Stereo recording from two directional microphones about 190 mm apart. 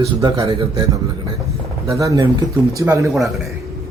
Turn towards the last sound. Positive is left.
turn(degrees=0)  # may be behind; listen again after turning